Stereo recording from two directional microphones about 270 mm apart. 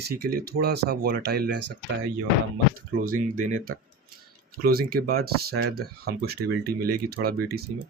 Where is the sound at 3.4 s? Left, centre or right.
Right.